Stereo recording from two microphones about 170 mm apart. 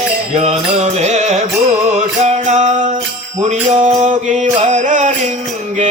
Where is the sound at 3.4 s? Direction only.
45° right (ahead or behind).